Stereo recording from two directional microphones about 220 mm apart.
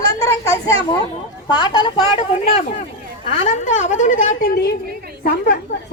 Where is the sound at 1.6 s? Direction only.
20° left (ahead or behind).